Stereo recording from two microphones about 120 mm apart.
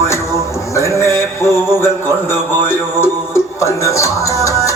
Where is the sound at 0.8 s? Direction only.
25° left (ahead or behind).